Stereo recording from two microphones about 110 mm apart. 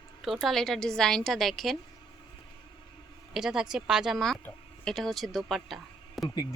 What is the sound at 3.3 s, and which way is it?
A woman's voice, 5° right (ahead or behind).